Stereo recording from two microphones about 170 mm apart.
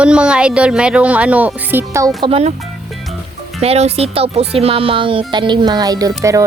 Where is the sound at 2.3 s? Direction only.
40° right (ahead or behind).